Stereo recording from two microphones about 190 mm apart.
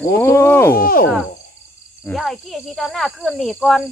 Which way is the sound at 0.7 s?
50° left (ahead or behind).